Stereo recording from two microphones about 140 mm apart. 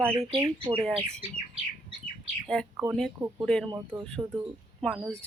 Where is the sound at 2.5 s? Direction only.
5° left (ahead or behind).